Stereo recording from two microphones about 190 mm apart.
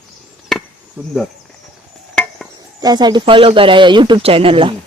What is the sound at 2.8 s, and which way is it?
Speech, 20° right (ahead or behind).